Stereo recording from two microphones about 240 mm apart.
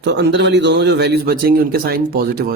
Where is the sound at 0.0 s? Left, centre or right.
Right.